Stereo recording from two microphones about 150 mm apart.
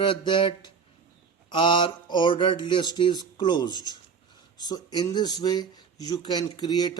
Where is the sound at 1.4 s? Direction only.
30° left (ahead or behind).